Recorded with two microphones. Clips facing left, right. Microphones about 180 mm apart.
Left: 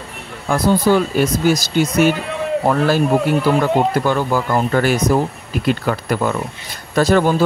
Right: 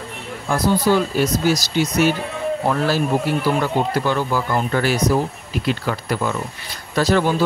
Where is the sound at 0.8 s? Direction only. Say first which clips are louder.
Left 3 dB; 55° left (ahead or behind).